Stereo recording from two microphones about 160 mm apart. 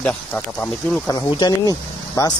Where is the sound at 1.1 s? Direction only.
25° left (ahead or behind).